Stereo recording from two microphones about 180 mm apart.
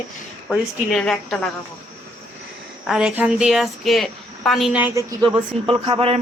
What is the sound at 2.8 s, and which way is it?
Speech, 5° right (ahead or behind).